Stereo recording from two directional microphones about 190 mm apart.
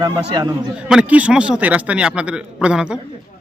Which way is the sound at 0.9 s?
5° right (ahead or behind).